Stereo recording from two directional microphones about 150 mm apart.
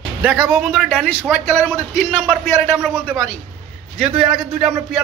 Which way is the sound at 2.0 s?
5° right (ahead or behind).